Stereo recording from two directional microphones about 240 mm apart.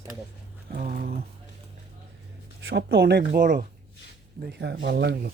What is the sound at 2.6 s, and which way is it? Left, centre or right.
Speech, right.